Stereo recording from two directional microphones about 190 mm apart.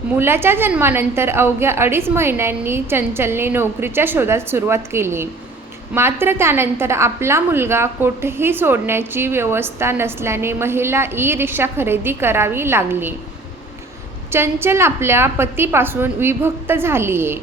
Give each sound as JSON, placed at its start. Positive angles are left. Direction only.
{"t": 0.2, "sound": "a woman's voice", "side_deg": -10}
{"t": 14.3, "sound": "a woman's voice", "side_deg": -15}